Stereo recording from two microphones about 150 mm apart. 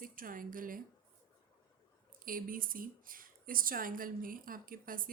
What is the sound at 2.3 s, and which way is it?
Speech, 70° right (ahead or behind).